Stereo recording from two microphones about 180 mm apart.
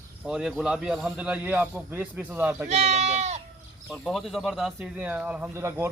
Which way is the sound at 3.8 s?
Centre (ahead or behind).